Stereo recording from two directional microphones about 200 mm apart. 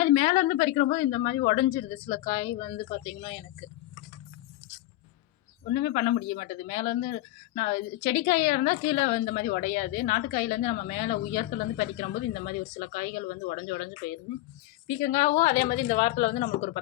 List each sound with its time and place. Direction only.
0.0 s speech: 40° left (ahead or behind)
5.7 s speech: 40° left (ahead or behind)
14.8 s speech: 40° left (ahead or behind)